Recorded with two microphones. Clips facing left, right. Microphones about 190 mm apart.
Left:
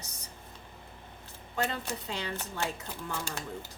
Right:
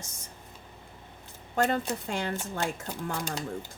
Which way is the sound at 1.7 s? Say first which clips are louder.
Right 7 dB; 50° right (ahead or behind).